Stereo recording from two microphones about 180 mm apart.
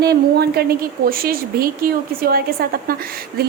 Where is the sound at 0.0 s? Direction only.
65° right (ahead or behind).